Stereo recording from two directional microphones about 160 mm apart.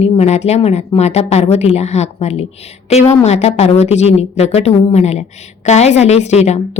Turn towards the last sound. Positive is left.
turn(degrees=45)  # may be behind; listen again after turning